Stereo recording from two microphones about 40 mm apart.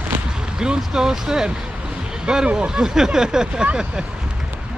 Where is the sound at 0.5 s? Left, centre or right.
Centre.